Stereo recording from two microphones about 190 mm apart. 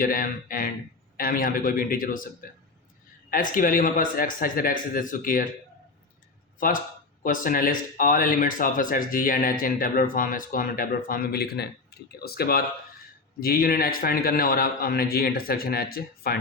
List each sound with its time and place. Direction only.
0.0 s speech: 45° left (ahead or behind)
6.6 s speech: 45° left (ahead or behind)